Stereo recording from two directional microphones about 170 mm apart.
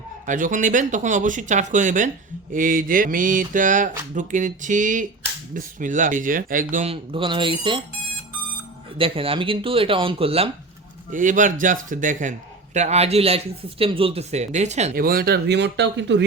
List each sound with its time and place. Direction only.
0.3 s mantra: 50° right (ahead or behind)
6.8 s speech: 35° right (ahead or behind)
9.0 s speech: 35° right (ahead or behind)
11.1 s mantra: 50° right (ahead or behind)
12.7 s speech: 40° right (ahead or behind)
14.9 s speech: 60° right (ahead or behind); by 16.2 s 90° right